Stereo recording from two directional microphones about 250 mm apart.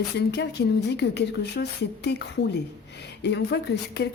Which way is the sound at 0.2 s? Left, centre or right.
Left.